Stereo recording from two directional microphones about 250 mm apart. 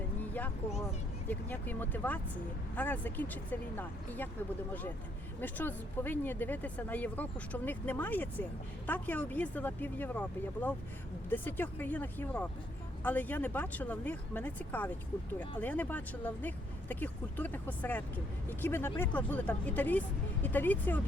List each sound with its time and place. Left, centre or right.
0.2 s a sound: centre
1.3 s speech: centre
5.4 s speech: centre